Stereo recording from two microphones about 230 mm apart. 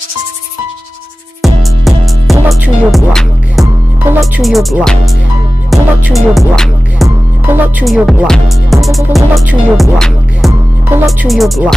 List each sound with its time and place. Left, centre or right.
1.4 s music: centre
3.6 s speech: centre
5.7 s music: centre
10.9 s speech: centre